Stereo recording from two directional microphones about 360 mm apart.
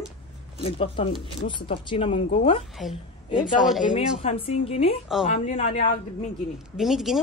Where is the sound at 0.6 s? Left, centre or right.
Centre.